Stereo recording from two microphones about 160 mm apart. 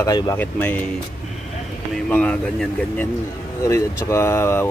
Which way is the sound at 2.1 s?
5° left (ahead or behind).